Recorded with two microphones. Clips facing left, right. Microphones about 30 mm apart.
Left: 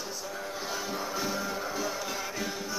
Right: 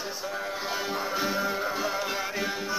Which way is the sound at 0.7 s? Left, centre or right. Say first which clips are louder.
Right 3 dB; right.